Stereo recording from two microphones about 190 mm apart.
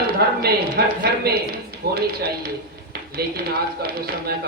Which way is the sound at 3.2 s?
55° right (ahead or behind).